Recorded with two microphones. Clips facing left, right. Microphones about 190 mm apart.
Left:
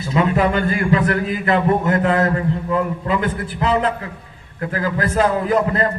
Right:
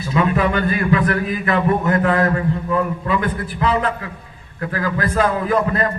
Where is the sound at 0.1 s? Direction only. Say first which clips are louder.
Left 1 dB; 25° left (ahead or behind).